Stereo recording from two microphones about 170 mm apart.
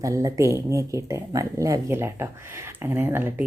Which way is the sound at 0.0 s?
20° right (ahead or behind).